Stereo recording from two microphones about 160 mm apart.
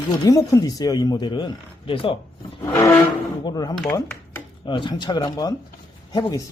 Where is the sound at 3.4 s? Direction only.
25° left (ahead or behind).